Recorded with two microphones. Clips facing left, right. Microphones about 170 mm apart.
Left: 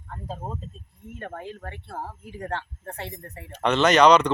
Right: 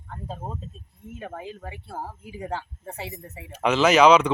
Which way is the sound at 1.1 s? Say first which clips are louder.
Even; 5° right (ahead or behind).